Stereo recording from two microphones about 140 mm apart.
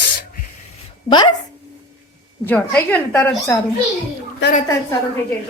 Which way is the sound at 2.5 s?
15° left (ahead or behind).